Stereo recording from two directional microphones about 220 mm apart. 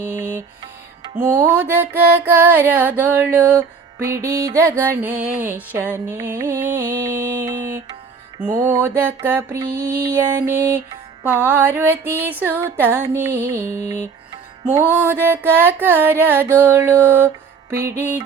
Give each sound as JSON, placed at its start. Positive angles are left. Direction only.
{"t": 0.0, "sound": "music", "side_deg": -10}
{"t": 8.5, "sound": "music", "side_deg": -10}